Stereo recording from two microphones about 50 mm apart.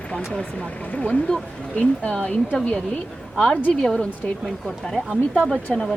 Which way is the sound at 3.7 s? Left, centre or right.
Centre.